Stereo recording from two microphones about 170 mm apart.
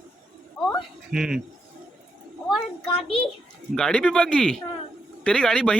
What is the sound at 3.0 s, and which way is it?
Speech, 35° left (ahead or behind).